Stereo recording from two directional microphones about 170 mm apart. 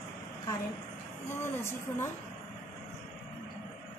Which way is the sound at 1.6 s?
15° left (ahead or behind).